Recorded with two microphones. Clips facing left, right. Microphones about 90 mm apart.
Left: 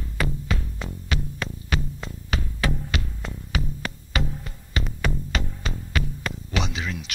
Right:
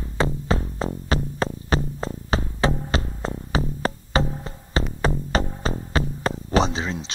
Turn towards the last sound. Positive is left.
turn(degrees=-30)  # may be behind; listen again after turning